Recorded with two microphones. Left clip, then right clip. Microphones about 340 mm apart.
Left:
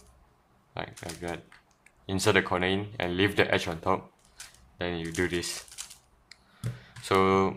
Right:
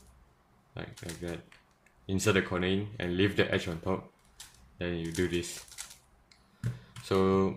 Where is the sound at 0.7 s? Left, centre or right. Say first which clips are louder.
Left 6 dB; centre.